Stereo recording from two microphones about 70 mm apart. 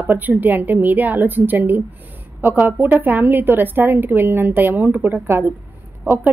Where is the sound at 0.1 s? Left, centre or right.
Right.